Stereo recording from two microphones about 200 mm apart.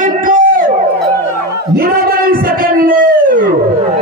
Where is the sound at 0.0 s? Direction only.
45° right (ahead or behind).